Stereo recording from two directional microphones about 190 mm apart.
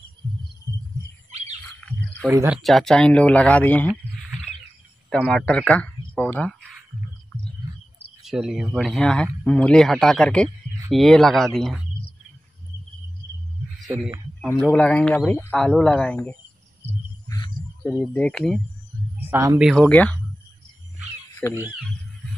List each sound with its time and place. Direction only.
2.2 s speech: 10° right (ahead or behind)
2.6 s speech: centre (ahead or behind)
5.1 s speech: 5° left (ahead or behind)
8.2 s a man's voice: centre (ahead or behind)
14.5 s a man's voice: 10° left (ahead or behind)
17.3 s cricket: 20° left (ahead or behind)
17.8 s a man's voice: 5° left (ahead or behind)
19.1 s speech: 10° right (ahead or behind)
19.7 s a man's voice: 5° left (ahead or behind)
21.4 s a man's voice: 5° left (ahead or behind)